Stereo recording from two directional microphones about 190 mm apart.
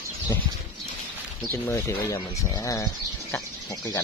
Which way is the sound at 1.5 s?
15° left (ahead or behind).